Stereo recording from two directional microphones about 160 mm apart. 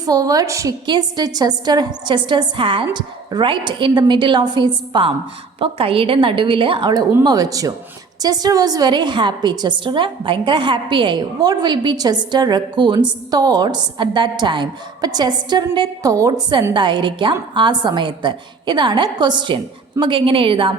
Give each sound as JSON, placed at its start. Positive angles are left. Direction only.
{"t": 0.0, "sound": "a woman's voice", "side_deg": -20}